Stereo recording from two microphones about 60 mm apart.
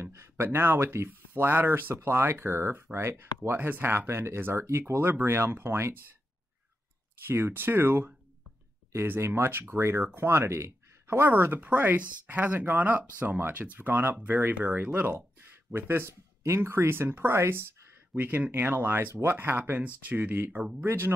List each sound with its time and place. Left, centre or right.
0.0 s speech: right
7.2 s speech: right
11.2 s speech: right
15.3 s speech: right
19.8 s speech: right
20.5 s speech: centre
20.8 s speech: right